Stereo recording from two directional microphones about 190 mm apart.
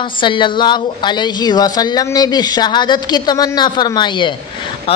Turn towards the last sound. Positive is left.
turn(degrees=25)  # may be behind; listen again after turning